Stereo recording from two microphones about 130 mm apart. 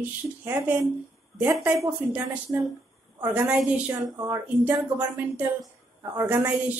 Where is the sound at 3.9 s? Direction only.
25° right (ahead or behind).